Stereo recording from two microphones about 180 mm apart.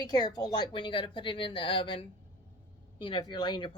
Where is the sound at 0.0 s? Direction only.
20° left (ahead or behind).